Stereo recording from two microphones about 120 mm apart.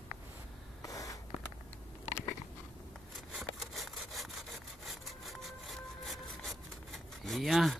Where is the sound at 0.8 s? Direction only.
30° left (ahead or behind).